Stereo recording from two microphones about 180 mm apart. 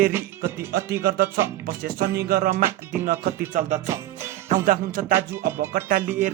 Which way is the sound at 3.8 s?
15° right (ahead or behind).